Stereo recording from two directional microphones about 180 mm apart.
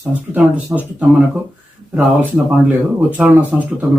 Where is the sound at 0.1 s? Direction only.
5° right (ahead or behind).